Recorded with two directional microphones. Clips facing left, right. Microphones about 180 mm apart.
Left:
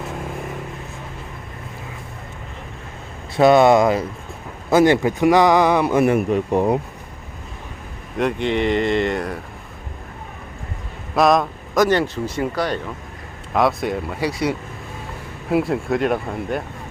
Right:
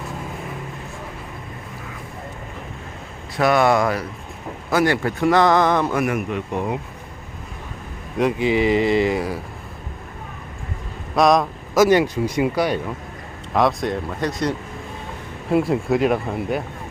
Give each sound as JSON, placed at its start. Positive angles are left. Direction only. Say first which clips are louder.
{"t": 3.3, "sound": "speech", "louder": "left 5 dB", "side_deg": 25}
{"t": 5.9, "sound": "speech", "louder": "left 5 dB", "side_deg": 30}
{"t": 8.2, "sound": "speech", "louder": "right 1 dB", "side_deg": -5}
{"t": 11.1, "sound": "speech", "louder": "even", "side_deg": 0}
{"t": 13.5, "sound": "speech", "louder": "even", "side_deg": 0}